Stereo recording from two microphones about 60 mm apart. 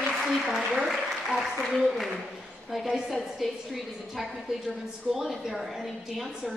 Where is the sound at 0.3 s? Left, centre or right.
Centre.